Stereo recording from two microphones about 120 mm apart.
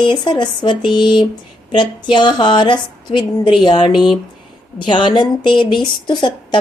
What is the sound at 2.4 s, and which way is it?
Speech, 40° left (ahead or behind).